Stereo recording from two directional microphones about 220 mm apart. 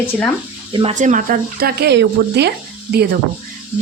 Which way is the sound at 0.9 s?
35° right (ahead or behind).